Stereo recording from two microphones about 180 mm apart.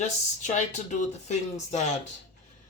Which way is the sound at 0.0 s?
40° left (ahead or behind).